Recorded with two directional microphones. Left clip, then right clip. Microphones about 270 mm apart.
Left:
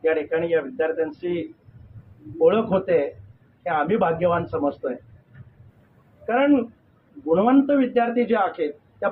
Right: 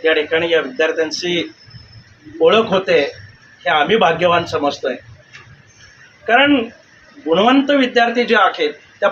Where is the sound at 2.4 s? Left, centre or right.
Centre.